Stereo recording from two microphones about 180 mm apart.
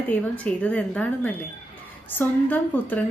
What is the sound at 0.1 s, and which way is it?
A woman's voice, 10° left (ahead or behind).